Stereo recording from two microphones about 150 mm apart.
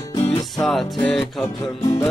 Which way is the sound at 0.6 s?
Centre (ahead or behind).